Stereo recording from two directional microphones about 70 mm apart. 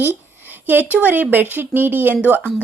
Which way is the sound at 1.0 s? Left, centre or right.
Right.